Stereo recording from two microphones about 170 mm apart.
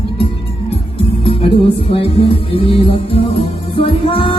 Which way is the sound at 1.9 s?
35° left (ahead or behind).